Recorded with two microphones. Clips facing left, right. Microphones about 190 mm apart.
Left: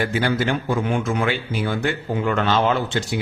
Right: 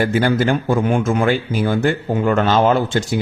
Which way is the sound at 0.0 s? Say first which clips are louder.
Right 5 dB; 45° right (ahead or behind).